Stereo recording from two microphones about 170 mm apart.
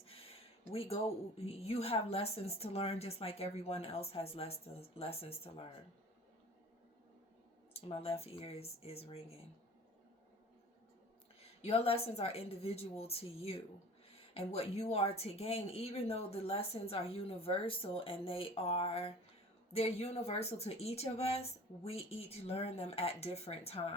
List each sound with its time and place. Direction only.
0.0 s speech: 35° left (ahead or behind)
7.7 s speech: 35° left (ahead or behind)
11.6 s speech: 35° left (ahead or behind)